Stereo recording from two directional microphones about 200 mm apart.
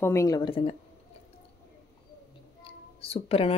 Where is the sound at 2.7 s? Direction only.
30° left (ahead or behind).